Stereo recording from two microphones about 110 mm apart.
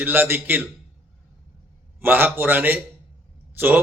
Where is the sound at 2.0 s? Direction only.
15° right (ahead or behind).